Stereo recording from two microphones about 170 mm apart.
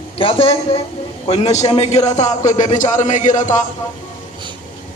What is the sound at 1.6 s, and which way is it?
Music, 35° left (ahead or behind).